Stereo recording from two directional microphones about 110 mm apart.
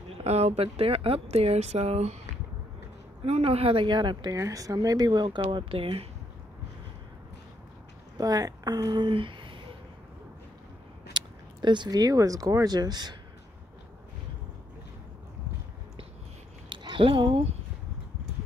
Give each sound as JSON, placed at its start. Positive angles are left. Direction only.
{"t": 0.2, "sound": "speech", "side_deg": -80}
{"t": 3.3, "sound": "speech", "side_deg": -65}
{"t": 4.4, "sound": "speech", "side_deg": -30}
{"t": 8.2, "sound": "speech", "side_deg": -35}
{"t": 11.1, "sound": "speech", "side_deg": -45}
{"t": 16.6, "sound": "a sound", "side_deg": -50}